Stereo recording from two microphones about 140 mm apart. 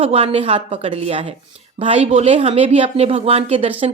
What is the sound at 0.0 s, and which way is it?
Speech, 45° right (ahead or behind).